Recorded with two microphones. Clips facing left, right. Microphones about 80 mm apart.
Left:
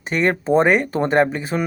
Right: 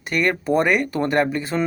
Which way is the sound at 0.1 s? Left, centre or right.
Left.